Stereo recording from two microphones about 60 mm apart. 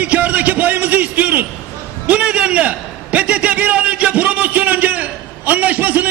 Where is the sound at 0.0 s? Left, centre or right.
Right.